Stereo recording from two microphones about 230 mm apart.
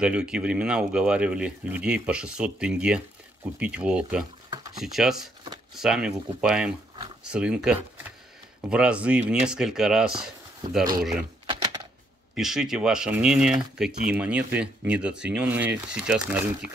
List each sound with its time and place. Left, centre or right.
0.0 s speech: centre
11.4 s typewriter: centre
12.4 s speech: centre